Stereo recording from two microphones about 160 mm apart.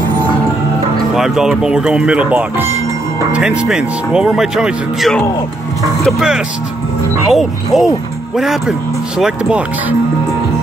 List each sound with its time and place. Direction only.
1.1 s speech: 5° right (ahead or behind)